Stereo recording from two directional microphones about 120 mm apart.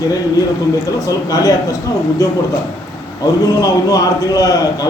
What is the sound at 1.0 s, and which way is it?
Speech, 30° left (ahead or behind).